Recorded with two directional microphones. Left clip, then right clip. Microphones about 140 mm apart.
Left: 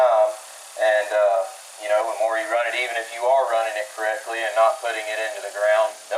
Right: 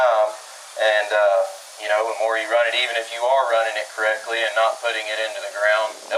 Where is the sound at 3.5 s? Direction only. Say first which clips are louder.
Right 2 dB; 20° right (ahead or behind).